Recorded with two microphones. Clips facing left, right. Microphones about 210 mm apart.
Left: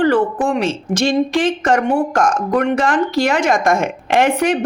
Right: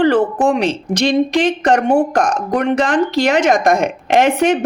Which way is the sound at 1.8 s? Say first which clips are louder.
Right 2 dB; 50° right (ahead or behind).